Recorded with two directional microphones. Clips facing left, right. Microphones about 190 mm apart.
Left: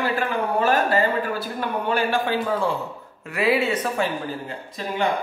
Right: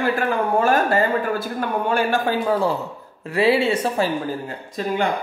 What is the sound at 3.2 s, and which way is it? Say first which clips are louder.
Speech: right 3 dB; 30° right (ahead or behind).